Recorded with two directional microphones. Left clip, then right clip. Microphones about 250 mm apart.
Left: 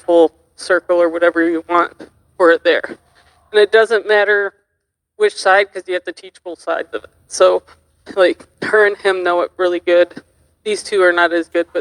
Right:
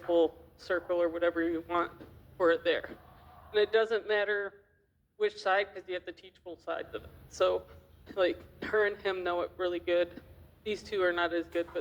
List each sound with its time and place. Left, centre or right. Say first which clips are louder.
0.1 s speech: left 16 dB; left